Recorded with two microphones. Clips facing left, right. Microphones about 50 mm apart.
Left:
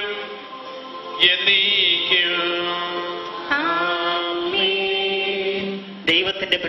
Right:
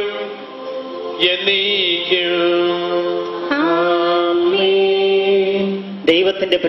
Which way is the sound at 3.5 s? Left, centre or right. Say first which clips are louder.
Right 5 dB; centre.